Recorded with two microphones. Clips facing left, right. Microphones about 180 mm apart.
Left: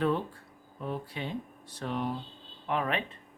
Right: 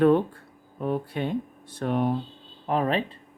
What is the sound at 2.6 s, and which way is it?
Speech, 35° right (ahead or behind).